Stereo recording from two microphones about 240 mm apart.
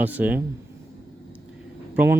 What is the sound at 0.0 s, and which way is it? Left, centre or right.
Speech, centre.